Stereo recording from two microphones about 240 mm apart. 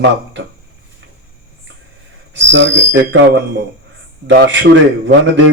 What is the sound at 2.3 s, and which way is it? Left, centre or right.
Speech, right.